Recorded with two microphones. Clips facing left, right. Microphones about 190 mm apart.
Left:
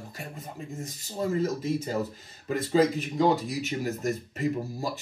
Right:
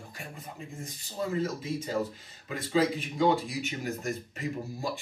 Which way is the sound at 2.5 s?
40° left (ahead or behind).